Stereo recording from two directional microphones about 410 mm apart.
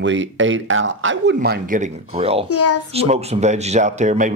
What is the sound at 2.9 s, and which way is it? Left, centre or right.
Speech, centre.